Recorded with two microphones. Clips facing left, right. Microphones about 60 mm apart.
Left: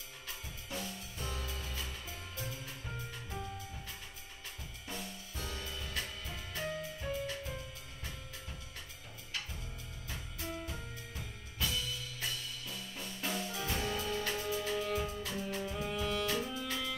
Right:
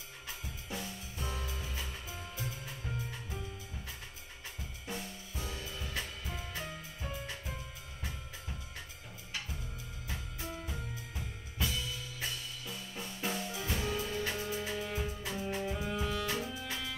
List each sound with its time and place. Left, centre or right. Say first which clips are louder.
0.7 s music: even; centre
4.8 s music: right 2 dB; centre
11.6 s music: even; centre
14.2 s music: even; right
14.7 s music: left 2 dB; centre
15.4 s music: right 4 dB; right
16.3 s music: left 1 dB; centre